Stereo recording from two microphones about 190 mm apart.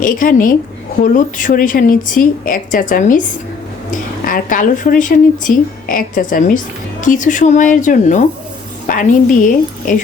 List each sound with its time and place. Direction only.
0.0 s speech: 45° left (ahead or behind)
4.3 s speech: 45° left (ahead or behind)